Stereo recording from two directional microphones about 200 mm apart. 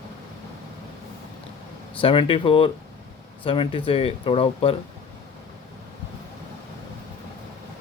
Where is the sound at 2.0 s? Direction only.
25° left (ahead or behind).